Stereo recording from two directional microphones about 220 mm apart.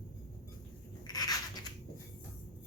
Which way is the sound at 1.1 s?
15° left (ahead or behind).